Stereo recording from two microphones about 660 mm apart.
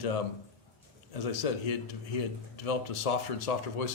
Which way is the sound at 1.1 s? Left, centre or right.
Left.